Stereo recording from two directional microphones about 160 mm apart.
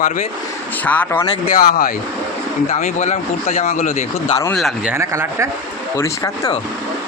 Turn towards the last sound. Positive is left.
turn(degrees=20)  # may be behind; listen again after turning